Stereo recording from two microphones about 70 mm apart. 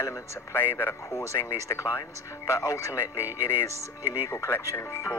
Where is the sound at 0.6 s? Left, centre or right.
Left.